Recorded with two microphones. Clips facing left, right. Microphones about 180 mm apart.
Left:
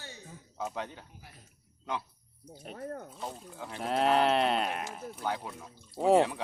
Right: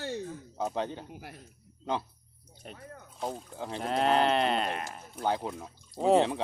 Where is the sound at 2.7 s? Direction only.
50° left (ahead or behind).